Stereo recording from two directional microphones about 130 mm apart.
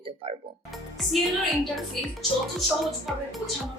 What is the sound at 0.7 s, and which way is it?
Speech, centre (ahead or behind).